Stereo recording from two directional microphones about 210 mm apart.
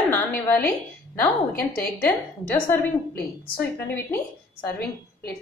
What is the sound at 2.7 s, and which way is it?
A woman's voice, 10° left (ahead or behind).